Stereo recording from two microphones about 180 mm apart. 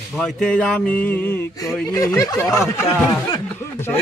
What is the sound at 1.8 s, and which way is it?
Speech, 20° left (ahead or behind).